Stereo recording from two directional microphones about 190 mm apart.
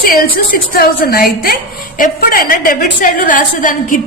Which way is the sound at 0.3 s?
50° left (ahead or behind).